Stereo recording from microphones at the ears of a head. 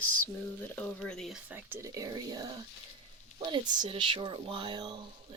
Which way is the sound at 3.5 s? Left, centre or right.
Right.